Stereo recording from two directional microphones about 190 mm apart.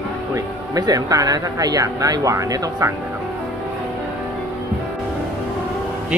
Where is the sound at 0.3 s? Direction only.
20° right (ahead or behind).